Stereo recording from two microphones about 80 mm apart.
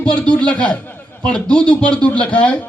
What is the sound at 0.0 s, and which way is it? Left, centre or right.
A man's voice, centre.